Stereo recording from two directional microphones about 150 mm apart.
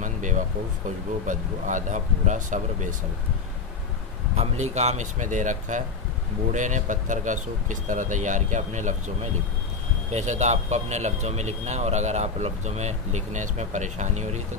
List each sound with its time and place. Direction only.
0.0 s a sound: 55° right (ahead or behind)
1.2 s speech: 60° right (ahead or behind)
4.4 s speech: 50° right (ahead or behind)